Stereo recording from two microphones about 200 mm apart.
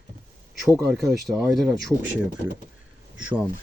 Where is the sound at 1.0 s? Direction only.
Centre (ahead or behind).